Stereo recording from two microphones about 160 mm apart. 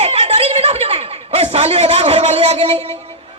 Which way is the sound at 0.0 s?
40° right (ahead or behind).